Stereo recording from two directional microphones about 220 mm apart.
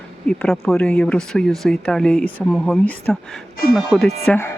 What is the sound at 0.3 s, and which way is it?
Speech, centre (ahead or behind).